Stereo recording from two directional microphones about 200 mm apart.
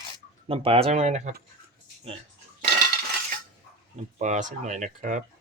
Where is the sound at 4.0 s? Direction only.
35° right (ahead or behind).